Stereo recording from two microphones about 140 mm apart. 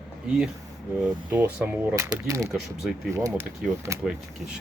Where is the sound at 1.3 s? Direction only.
10° right (ahead or behind).